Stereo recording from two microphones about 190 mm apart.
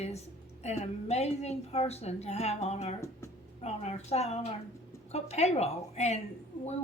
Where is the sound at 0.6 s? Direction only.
35° left (ahead or behind).